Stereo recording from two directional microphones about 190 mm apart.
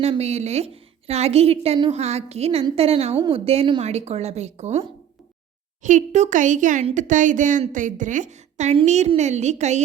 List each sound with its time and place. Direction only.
0.0 s speech: 35° right (ahead or behind)